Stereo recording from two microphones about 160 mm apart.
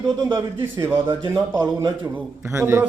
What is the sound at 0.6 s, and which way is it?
A man's voice, 15° right (ahead or behind).